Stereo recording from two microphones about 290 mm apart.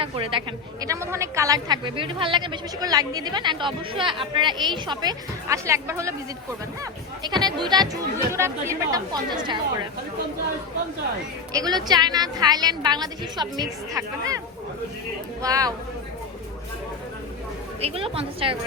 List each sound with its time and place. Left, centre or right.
0.0 s a woman's voice: centre
7.2 s a woman's voice: centre
11.5 s a woman's voice: centre
17.7 s a woman's voice: centre